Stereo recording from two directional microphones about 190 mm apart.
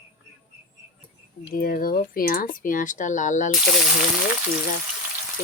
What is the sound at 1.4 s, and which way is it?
Speech, 50° left (ahead or behind).